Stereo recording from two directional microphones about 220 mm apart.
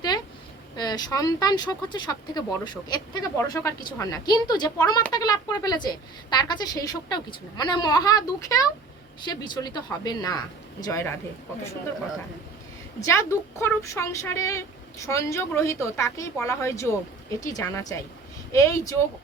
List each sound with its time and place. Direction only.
0.8 s a woman's voice: 20° left (ahead or behind)
13.0 s speech: 15° left (ahead or behind)